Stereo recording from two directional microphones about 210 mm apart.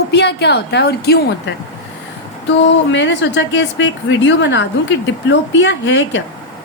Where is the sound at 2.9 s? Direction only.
60° left (ahead or behind).